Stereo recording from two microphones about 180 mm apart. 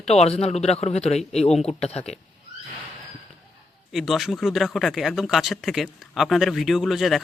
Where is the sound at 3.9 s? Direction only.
Centre (ahead or behind).